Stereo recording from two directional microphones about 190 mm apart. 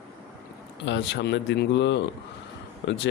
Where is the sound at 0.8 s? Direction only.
70° left (ahead or behind).